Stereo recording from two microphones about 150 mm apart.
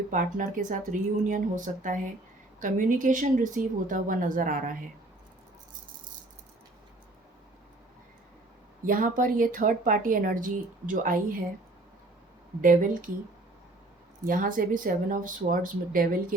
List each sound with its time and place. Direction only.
0.1 s a woman's voice: 60° right (ahead or behind)
8.9 s a woman's voice: 65° right (ahead or behind)
12.6 s a woman's voice: 60° right (ahead or behind)
14.3 s a woman's voice: 65° right (ahead or behind)